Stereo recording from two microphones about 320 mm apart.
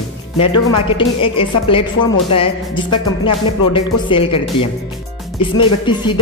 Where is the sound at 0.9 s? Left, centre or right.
Centre.